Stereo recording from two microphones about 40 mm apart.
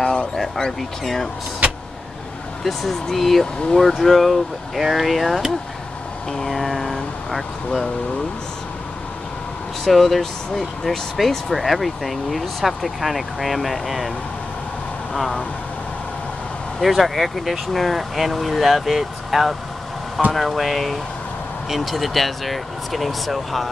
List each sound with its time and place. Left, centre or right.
0.0 s a sound: left
0.6 s speech: centre
2.6 s speech: centre
9.8 s speech: centre
15.1 s speech: centre
16.8 s speech: centre